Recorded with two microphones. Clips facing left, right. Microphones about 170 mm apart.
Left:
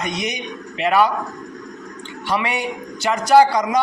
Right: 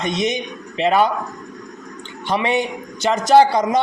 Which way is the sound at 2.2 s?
25° right (ahead or behind).